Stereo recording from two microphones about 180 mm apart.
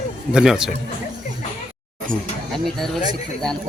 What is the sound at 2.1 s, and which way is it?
Speech, centre (ahead or behind).